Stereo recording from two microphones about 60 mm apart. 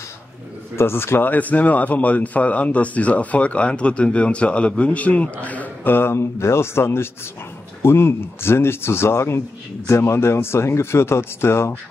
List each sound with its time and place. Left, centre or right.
0.7 s speech: left
5.9 s speech: left